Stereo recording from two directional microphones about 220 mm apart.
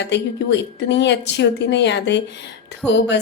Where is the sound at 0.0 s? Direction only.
55° left (ahead or behind).